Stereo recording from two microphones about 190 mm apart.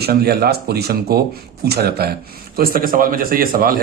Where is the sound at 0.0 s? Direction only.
55° right (ahead or behind).